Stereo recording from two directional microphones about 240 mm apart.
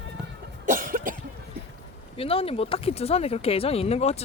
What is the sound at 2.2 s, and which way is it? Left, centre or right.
Speech, left.